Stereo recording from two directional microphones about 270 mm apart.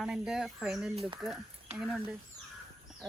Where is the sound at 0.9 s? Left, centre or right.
Centre.